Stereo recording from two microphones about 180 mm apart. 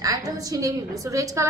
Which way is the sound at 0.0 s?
20° right (ahead or behind).